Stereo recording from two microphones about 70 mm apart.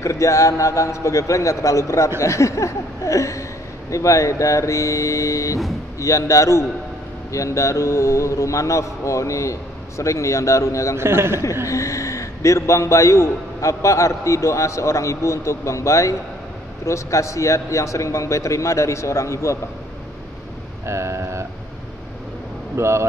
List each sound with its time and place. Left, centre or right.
0.0 s a man's voice: left
11.0 s a man's voice: right
11.6 s a man's voice: left
20.8 s vehicle: right
22.8 s a man's voice: right